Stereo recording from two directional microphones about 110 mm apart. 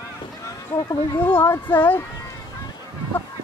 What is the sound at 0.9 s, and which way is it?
Speech, 20° left (ahead or behind).